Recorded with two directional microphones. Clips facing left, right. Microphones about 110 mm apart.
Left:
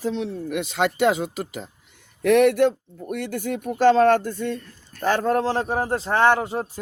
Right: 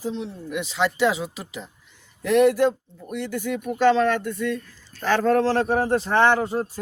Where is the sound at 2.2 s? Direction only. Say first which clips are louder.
Left 1 dB; 70° left (ahead or behind).